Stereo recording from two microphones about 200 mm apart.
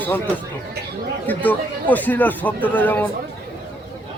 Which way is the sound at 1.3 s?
10° left (ahead or behind).